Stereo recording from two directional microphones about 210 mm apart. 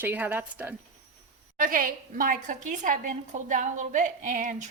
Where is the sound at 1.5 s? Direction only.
40° right (ahead or behind).